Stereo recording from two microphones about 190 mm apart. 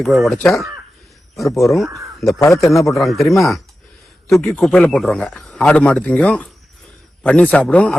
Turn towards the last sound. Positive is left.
turn(degrees=5)  # may be behind; listen again after turning